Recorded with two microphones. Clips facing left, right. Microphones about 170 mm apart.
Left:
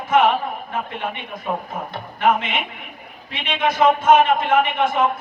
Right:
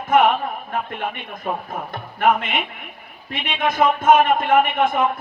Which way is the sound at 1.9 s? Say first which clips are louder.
Even; 50° right (ahead or behind).